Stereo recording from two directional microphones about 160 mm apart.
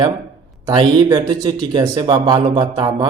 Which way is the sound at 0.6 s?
25° right (ahead or behind).